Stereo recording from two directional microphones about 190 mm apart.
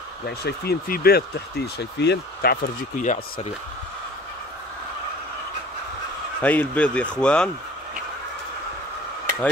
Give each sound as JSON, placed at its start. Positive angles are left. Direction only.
{"t": 0.4, "sound": "speech", "side_deg": 55}
{"t": 1.8, "sound": "speech", "side_deg": 65}
{"t": 6.4, "sound": "speech", "side_deg": 10}